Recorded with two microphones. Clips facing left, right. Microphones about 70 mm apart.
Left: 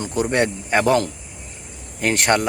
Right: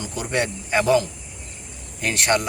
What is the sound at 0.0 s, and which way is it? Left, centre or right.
Speech, left.